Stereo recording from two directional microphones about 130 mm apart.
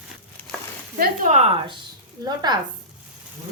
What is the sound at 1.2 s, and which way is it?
Speech, 60° right (ahead or behind).